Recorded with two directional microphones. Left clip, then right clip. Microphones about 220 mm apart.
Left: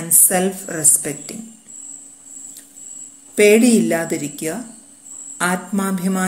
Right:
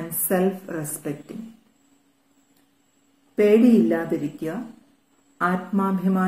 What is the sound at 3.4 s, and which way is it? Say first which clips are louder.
Speech: left 4 dB; 45° left (ahead or behind).